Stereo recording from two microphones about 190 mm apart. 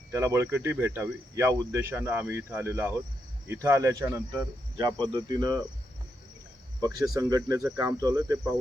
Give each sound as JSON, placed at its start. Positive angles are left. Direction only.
{"t": 0.1, "sound": "cricket", "side_deg": -15}
{"t": 3.4, "sound": "speech", "side_deg": -15}
{"t": 6.8, "sound": "cricket", "side_deg": -20}